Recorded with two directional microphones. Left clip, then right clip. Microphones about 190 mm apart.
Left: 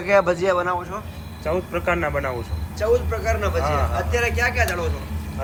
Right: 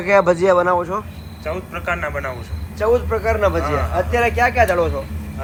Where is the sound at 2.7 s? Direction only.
30° right (ahead or behind).